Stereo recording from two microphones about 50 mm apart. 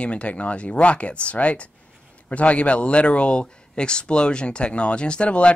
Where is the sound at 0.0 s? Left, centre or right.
Left.